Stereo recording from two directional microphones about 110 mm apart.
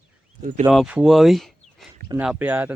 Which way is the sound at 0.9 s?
5° right (ahead or behind).